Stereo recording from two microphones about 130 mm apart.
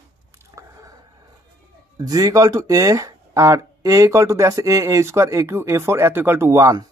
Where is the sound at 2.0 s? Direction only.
30° right (ahead or behind).